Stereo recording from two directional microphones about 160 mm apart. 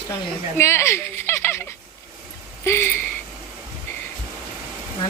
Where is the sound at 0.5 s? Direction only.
15° left (ahead or behind).